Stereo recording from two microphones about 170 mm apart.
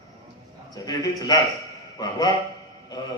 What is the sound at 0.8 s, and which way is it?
A man's voice, 20° left (ahead or behind).